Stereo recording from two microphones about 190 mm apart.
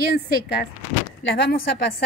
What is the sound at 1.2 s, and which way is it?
Speech, 60° left (ahead or behind).